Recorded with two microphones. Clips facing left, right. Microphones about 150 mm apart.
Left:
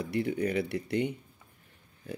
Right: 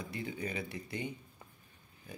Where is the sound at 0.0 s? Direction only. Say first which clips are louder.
Left 10 dB; 70° left (ahead or behind).